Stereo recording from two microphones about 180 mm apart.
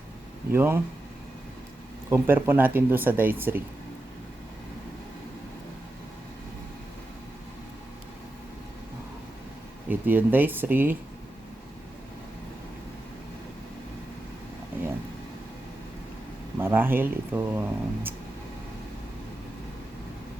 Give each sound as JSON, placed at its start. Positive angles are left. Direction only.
{"t": 0.5, "sound": "speech", "side_deg": -15}
{"t": 2.0, "sound": "speech", "side_deg": -10}
{"t": 9.9, "sound": "speech", "side_deg": -10}
{"t": 16.6, "sound": "speech", "side_deg": -10}